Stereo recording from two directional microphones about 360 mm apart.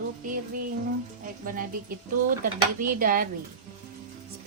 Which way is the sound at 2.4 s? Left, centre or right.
Right.